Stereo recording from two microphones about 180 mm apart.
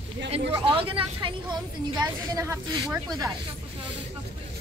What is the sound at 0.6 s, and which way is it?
A woman's voice, 30° right (ahead or behind).